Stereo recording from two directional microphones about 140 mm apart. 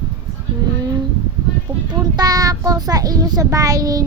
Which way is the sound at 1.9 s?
30° right (ahead or behind).